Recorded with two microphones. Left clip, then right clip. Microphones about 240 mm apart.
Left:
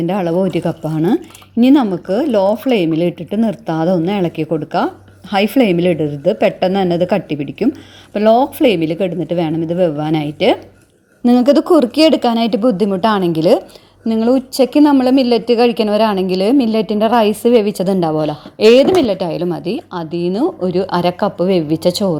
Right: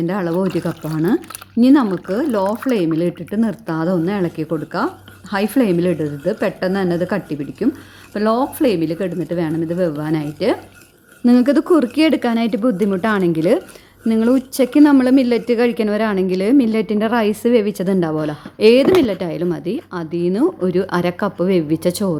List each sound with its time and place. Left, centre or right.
0.0 s a woman's voice: centre
2.7 s speech: right
3.3 s a woman's voice: centre
10.2 s speech: right
11.3 s a woman's voice: centre